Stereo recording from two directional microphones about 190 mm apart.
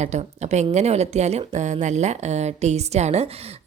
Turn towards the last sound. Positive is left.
turn(degrees=-35)  # may be behind; listen again after turning